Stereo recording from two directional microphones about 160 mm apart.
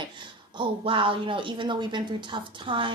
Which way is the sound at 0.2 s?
30° right (ahead or behind).